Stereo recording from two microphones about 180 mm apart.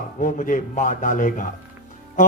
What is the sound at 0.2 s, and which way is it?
Speech, 45° left (ahead or behind).